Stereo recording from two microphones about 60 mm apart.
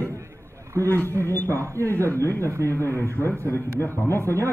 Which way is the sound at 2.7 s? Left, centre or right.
Left.